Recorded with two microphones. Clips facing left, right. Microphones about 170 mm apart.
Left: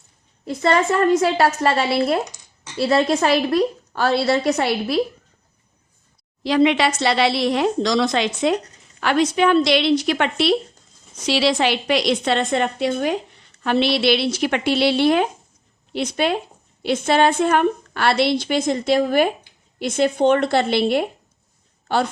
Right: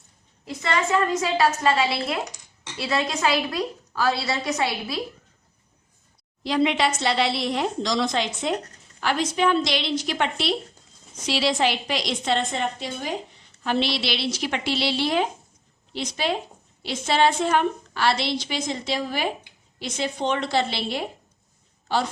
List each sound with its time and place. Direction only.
0.4 s a woman's voice: 55° left (ahead or behind)
6.4 s a woman's voice: 90° left; by 10.5 s 65° left (ahead or behind)
11.3 s a woman's voice: 80° left; by 22.1 s 55° left (ahead or behind)